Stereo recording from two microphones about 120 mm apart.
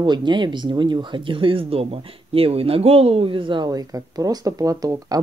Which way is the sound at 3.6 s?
30° right (ahead or behind).